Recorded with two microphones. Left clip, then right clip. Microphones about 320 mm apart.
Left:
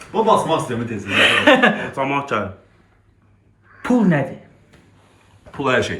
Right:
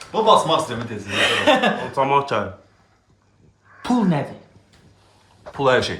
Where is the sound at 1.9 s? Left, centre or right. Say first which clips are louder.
Right 2 dB; right.